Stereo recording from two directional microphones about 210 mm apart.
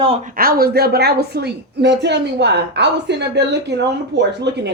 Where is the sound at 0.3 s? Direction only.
45° right (ahead or behind).